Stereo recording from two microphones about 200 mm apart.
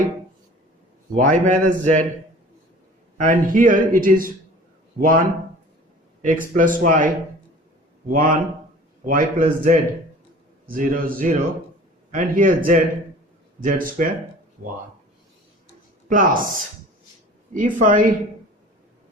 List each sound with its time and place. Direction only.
1.1 s a man's voice: 40° right (ahead or behind)
3.2 s speech: 40° right (ahead or behind)
6.2 s a man's voice: 40° right (ahead or behind)
16.0 s speech: 40° right (ahead or behind)
17.5 s a man's voice: 40° right (ahead or behind)